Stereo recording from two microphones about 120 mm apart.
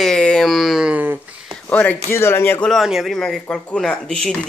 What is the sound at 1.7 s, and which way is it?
Speech, 10° left (ahead or behind).